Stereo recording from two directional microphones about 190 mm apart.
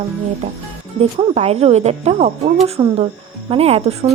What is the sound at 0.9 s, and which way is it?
Speech, 35° right (ahead or behind).